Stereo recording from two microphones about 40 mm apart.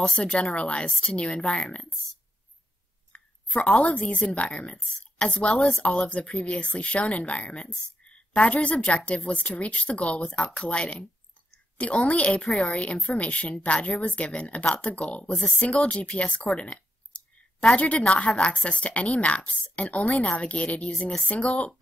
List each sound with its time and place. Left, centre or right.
0.2 s speech: left
3.1 s a sound: left
3.9 s speech: left
5.5 s a woman's voice: centre
5.8 s a woman's voice: left
10.3 s speech: left
16.6 s a sound: left
17.7 s speech: left